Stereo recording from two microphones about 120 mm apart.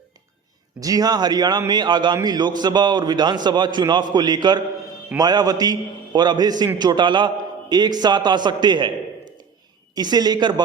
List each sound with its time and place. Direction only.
0.8 s a man's voice: 30° right (ahead or behind)
9.9 s a man's voice: 35° right (ahead or behind)